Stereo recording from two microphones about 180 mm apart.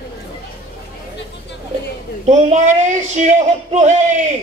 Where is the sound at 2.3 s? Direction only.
40° right (ahead or behind).